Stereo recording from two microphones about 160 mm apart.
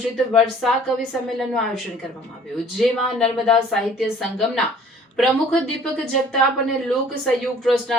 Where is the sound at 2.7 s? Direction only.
Centre (ahead or behind).